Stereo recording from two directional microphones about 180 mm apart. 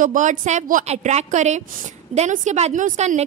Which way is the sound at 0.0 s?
45° right (ahead or behind).